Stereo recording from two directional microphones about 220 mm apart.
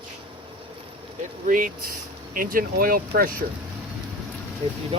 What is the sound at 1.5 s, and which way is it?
Speech, 40° right (ahead or behind).